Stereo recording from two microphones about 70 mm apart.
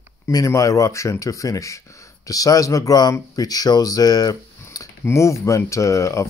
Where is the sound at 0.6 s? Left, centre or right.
Left.